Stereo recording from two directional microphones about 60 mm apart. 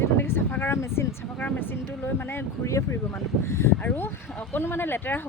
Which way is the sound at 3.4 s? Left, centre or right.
Left.